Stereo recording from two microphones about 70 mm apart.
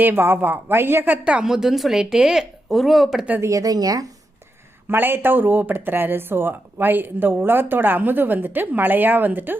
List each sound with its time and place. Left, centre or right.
0.0 s speech: right
1.2 s a woman's voice: centre
3.4 s speech: right
4.9 s speech: right